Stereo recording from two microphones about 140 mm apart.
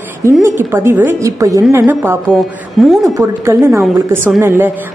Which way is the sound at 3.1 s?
20° right (ahead or behind).